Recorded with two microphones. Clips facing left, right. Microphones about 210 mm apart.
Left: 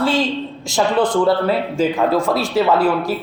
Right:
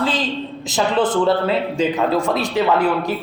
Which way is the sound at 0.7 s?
20° right (ahead or behind).